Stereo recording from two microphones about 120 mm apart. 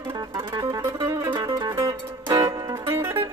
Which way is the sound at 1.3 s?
40° right (ahead or behind).